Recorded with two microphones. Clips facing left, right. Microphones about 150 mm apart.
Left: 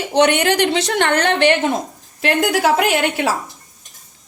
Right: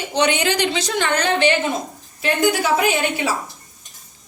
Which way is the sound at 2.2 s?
85° left.